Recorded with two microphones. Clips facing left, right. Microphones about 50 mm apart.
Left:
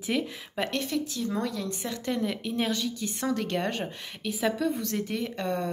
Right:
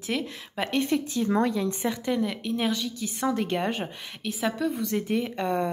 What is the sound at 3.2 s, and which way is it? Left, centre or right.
A woman's voice, centre.